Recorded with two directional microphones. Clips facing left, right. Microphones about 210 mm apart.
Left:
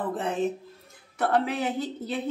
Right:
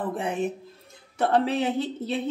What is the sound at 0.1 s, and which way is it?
Speech, 15° right (ahead or behind).